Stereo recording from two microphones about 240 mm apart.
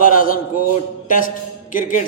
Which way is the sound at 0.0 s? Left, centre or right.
Left.